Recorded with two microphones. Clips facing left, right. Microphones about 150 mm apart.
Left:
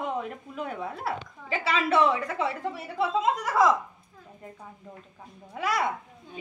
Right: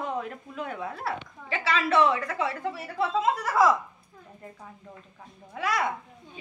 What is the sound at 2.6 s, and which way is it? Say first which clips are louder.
Speech: even; centre (ahead or behind).